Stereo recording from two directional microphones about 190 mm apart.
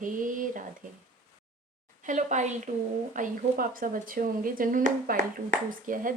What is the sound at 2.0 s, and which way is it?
A woman's voice, 40° right (ahead or behind).